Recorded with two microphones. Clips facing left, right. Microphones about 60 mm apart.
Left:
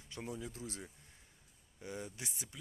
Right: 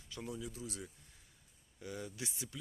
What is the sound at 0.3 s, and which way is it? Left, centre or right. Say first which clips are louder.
Speech: right 1 dB; left.